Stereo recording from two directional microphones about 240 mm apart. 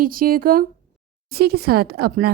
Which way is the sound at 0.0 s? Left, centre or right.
Right.